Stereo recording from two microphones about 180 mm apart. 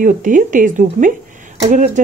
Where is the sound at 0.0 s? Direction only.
45° right (ahead or behind).